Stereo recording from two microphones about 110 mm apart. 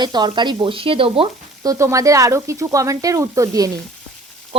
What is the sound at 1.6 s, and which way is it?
Speech, 30° right (ahead or behind).